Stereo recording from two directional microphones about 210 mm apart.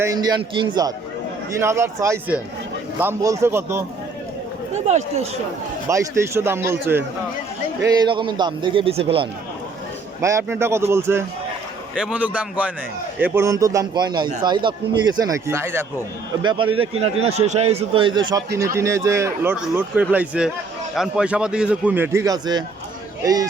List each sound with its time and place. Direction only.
0.0 s a man's voice: 20° right (ahead or behind)
4.9 s speech: 30° right (ahead or behind)
5.9 s a man's voice: 15° right (ahead or behind)
10.2 s a man's voice: 15° right (ahead or behind)
16.3 s a man's voice: 20° right (ahead or behind)